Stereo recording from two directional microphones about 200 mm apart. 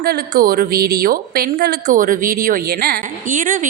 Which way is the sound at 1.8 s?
40° right (ahead or behind).